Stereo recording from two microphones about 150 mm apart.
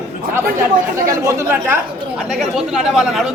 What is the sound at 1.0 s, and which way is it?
Speech, 20° right (ahead or behind).